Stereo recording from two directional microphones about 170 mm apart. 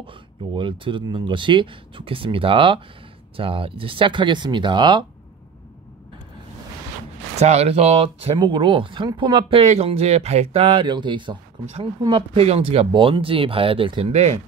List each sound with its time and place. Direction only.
0.6 s speech: 30° right (ahead or behind)
7.3 s speech: 40° right (ahead or behind)